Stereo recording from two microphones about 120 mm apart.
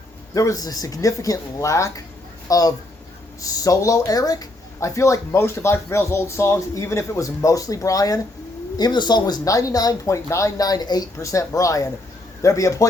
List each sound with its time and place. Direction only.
0.3 s speech: 30° left (ahead or behind)